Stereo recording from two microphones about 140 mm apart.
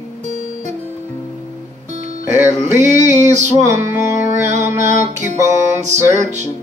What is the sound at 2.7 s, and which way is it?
Music, 55° right (ahead or behind).